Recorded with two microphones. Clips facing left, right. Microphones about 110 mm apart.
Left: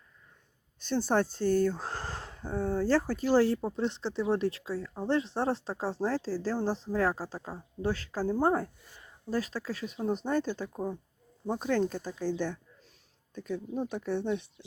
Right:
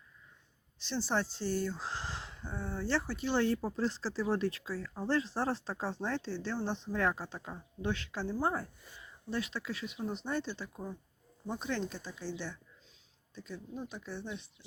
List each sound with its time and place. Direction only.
0.8 s speech: 50° left (ahead or behind)
10.7 s speech: 35° left (ahead or behind)
11.4 s speech: 45° left (ahead or behind)
13.3 s a woman's voice: 55° left (ahead or behind)